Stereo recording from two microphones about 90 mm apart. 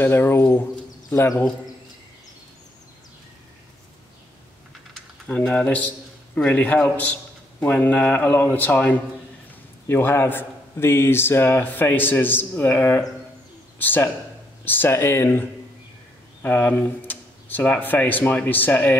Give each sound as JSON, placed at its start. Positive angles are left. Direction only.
{"t": 0.0, "sound": "a man's voice", "side_deg": 25}
{"t": 4.9, "sound": "typing", "side_deg": 5}
{"t": 6.3, "sound": "a man's voice", "side_deg": 15}
{"t": 16.4, "sound": "a man's voice", "side_deg": 20}